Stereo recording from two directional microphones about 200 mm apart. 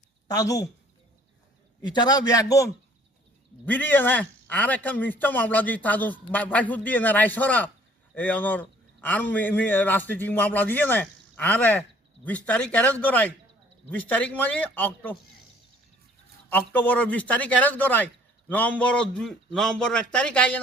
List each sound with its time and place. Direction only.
0.3 s a man's voice: 15° left (ahead or behind)
1.8 s a man's voice: 20° left (ahead or behind)
3.7 s a man's voice: 10° left (ahead or behind)
16.5 s a man's voice: 10° left (ahead or behind)